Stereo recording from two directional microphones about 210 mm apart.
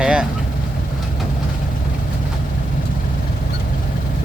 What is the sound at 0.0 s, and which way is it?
Vehicle, 5° right (ahead or behind).